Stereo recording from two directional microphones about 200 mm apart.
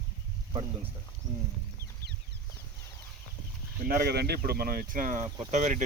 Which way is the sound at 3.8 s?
50° right (ahead or behind).